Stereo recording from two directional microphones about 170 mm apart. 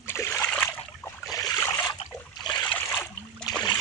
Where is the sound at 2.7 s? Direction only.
10° left (ahead or behind).